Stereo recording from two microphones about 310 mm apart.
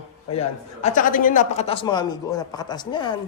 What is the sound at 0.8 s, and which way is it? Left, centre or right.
A man's voice, left.